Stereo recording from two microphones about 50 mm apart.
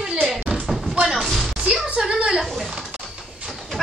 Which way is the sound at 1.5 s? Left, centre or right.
Right.